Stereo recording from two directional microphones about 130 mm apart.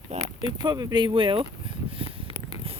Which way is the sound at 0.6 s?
30° right (ahead or behind).